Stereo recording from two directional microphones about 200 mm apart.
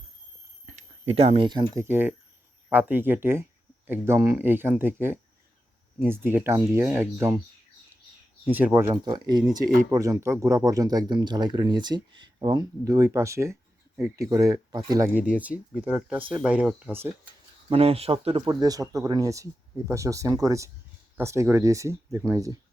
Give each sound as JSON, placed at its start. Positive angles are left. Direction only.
{"t": 0.6, "sound": "speech", "side_deg": -35}
{"t": 8.4, "sound": "speech", "side_deg": -10}
{"t": 8.9, "sound": "speech", "side_deg": -20}
{"t": 17.7, "sound": "speech", "side_deg": -30}